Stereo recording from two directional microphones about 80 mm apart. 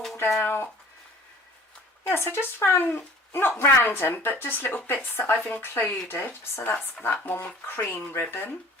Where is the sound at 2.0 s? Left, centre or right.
Left.